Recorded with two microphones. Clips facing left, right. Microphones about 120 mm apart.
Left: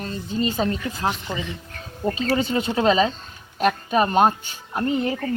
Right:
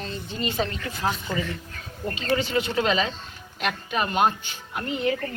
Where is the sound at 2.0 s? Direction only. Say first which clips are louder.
Left 3 dB; 5° left (ahead or behind).